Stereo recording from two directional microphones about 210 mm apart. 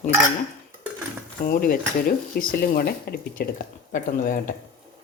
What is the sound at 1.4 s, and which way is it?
Speech, 45° left (ahead or behind).